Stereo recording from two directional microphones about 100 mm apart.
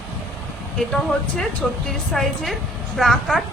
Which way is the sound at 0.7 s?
5° left (ahead or behind).